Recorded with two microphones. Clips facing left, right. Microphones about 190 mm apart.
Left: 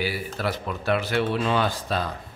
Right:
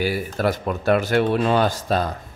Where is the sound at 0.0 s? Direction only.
45° right (ahead or behind).